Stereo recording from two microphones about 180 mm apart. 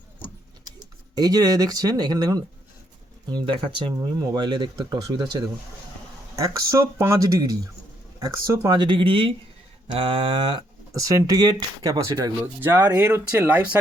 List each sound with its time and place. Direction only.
1.1 s speech: 20° right (ahead or behind)